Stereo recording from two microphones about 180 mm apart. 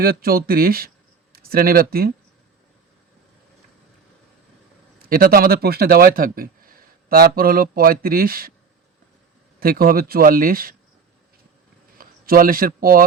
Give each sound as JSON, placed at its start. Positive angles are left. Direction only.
{"t": 0.0, "sound": "speech", "side_deg": -55}
{"t": 4.9, "sound": "a man's voice", "side_deg": -55}
{"t": 9.6, "sound": "speech", "side_deg": -55}
{"t": 11.9, "sound": "speech", "side_deg": -55}